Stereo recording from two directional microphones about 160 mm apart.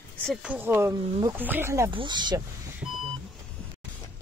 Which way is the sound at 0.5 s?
15° right (ahead or behind).